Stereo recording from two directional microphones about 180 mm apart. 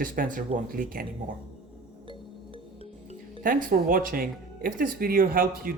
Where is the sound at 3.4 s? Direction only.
50° right (ahead or behind).